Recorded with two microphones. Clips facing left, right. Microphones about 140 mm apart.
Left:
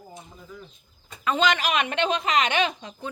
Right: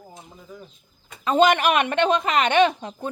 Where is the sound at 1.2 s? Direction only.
45° right (ahead or behind).